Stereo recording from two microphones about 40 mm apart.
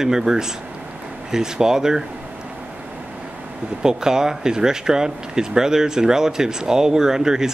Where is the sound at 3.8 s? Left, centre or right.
Centre.